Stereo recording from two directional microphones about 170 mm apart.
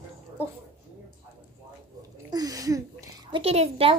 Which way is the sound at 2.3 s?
20° right (ahead or behind).